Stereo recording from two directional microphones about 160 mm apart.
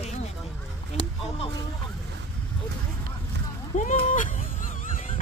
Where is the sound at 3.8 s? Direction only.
50° left (ahead or behind).